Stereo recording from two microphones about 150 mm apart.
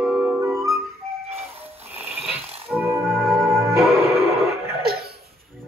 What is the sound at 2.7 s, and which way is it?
Music, 15° right (ahead or behind).